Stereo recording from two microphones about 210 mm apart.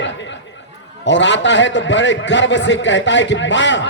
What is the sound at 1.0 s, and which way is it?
A man's voice, 60° left (ahead or behind).